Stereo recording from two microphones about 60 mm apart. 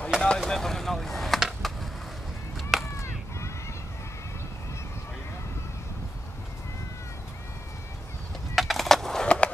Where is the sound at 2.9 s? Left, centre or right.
Left.